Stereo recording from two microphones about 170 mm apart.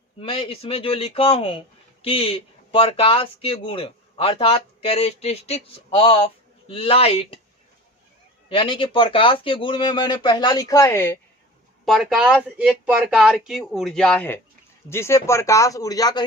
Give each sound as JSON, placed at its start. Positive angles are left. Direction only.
{"t": 0.2, "sound": "speech", "side_deg": 35}
{"t": 8.4, "sound": "speech", "side_deg": 30}
{"t": 11.9, "sound": "speech", "side_deg": 0}